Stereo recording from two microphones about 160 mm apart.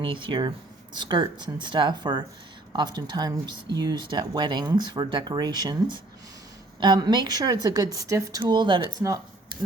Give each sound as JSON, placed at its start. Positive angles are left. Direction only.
{"t": 0.0, "sound": "a woman's voice", "side_deg": -30}